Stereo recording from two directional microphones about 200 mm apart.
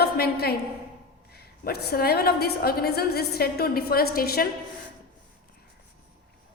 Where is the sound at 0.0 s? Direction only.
50° left (ahead or behind).